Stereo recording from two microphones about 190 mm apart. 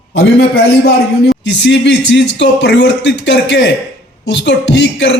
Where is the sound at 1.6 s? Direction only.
65° left (ahead or behind).